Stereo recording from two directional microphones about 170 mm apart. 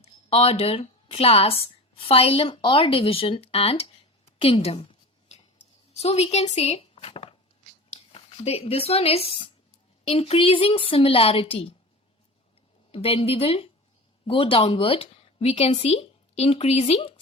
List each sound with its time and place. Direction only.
0.0 s a woman's voice: 35° left (ahead or behind)
4.4 s a sound: 35° left (ahead or behind)
6.0 s a woman's voice: 40° left (ahead or behind)
12.9 s a woman's voice: 35° left (ahead or behind)